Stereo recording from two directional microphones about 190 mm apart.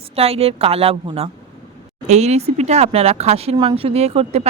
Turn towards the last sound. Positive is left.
turn(degrees=-30)  # may be behind; listen again after turning